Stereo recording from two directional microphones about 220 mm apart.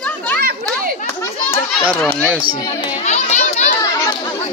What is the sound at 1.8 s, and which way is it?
Speech, 5° left (ahead or behind).